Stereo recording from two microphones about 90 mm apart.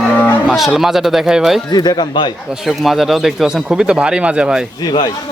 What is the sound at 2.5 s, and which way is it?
Speech, centre (ahead or behind).